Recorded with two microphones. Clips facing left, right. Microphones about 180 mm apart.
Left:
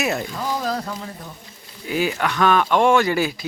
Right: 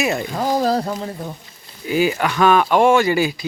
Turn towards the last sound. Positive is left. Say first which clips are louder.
# right 3 dB
turn(degrees=0)  # may be behind; listen again after turning